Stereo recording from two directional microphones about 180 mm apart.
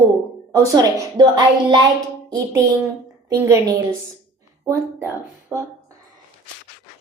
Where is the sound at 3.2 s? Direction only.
15° right (ahead or behind).